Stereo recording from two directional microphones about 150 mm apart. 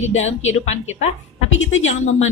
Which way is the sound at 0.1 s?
50° left (ahead or behind).